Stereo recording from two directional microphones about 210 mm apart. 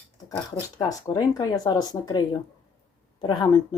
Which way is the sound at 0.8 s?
15° left (ahead or behind).